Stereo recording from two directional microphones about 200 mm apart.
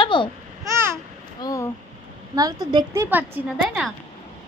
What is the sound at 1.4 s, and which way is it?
Speech, 15° left (ahead or behind).